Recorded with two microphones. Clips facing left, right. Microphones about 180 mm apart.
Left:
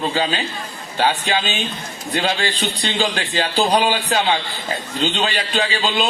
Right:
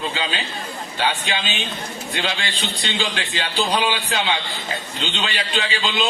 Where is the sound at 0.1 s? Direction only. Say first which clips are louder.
Left 5 dB; 45° left (ahead or behind).